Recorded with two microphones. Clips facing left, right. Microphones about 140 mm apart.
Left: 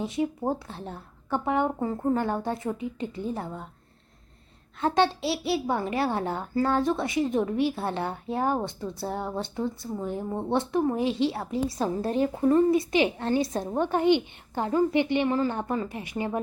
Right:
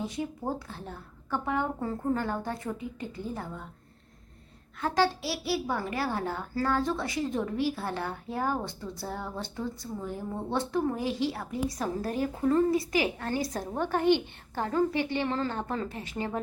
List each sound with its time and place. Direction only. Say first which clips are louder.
0.0 s a child's voice: left 5 dB; 25° left (ahead or behind)
4.8 s a child's voice: left 3 dB; 25° left (ahead or behind)